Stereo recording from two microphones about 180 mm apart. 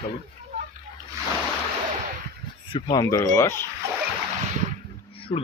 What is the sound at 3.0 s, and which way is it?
Speech, 15° left (ahead or behind).